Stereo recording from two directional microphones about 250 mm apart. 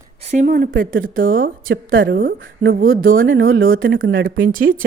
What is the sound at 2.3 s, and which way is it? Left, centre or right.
Speech, right.